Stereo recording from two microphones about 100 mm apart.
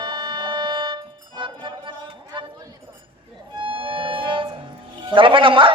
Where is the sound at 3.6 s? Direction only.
60° right (ahead or behind).